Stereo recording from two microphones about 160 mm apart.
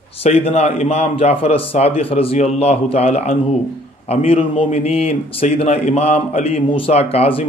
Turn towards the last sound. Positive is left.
turn(degrees=35)  # may be behind; listen again after turning